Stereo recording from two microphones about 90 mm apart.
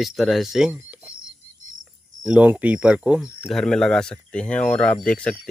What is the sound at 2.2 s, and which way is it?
Speech, 15° right (ahead or behind).